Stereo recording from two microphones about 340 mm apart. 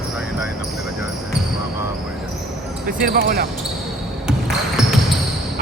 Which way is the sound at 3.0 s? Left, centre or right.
Right.